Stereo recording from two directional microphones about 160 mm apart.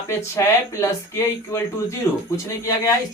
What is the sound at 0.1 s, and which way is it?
Speech, 20° left (ahead or behind).